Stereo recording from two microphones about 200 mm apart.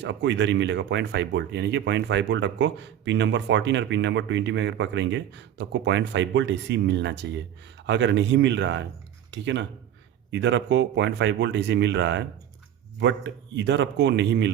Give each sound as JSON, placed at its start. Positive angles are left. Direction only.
{"t": 0.0, "sound": "speech", "side_deg": -65}